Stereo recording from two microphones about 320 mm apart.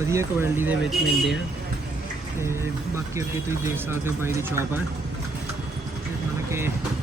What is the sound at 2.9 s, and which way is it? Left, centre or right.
Speech, centre.